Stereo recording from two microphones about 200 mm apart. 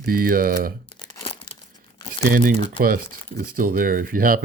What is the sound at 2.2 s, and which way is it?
Speech, 45° right (ahead or behind).